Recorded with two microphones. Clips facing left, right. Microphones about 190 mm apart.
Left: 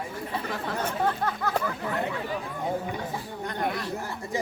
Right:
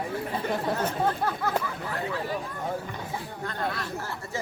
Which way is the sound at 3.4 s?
15° left (ahead or behind).